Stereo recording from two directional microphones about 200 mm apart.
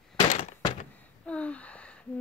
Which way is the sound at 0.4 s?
30° left (ahead or behind).